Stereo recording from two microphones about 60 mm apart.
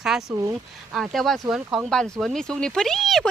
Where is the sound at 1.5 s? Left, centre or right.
Centre.